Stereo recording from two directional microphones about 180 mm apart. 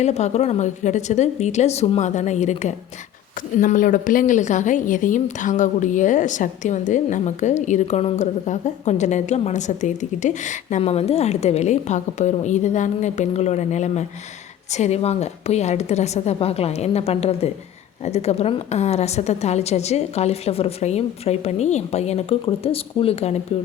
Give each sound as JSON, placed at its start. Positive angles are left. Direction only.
{"t": 0.0, "sound": "speech", "side_deg": 40}